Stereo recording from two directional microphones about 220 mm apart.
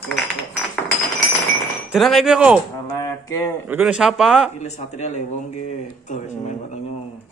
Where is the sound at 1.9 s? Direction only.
Centre (ahead or behind).